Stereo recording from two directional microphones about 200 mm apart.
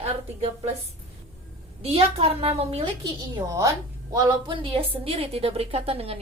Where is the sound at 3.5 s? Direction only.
15° right (ahead or behind).